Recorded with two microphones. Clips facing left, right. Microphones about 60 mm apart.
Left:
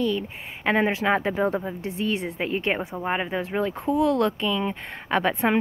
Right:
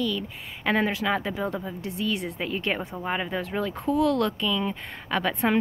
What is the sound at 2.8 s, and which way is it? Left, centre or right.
Speech, centre.